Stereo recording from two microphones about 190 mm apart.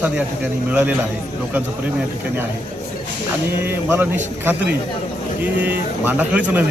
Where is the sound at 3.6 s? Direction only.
10° right (ahead or behind).